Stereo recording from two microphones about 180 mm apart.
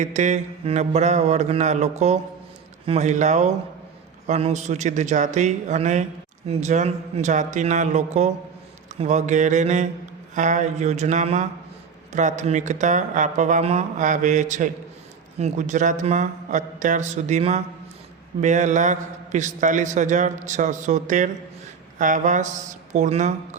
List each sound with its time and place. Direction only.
0.0 s mantra: 40° right (ahead or behind)
12.1 s a man's voice: 40° right (ahead or behind)
21.9 s mantra: 45° right (ahead or behind)